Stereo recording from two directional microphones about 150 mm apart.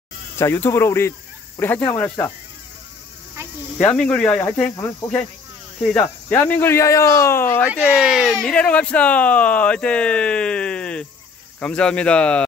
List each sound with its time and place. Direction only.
0.4 s speech: 15° left (ahead or behind)
3.8 s speech: 5° left (ahead or behind)
7.8 s speech: centre (ahead or behind)